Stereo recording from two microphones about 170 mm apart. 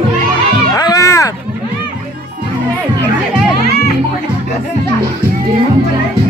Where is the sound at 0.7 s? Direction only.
20° left (ahead or behind).